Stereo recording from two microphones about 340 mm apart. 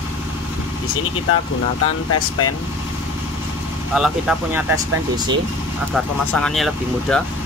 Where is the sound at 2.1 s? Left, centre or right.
Left.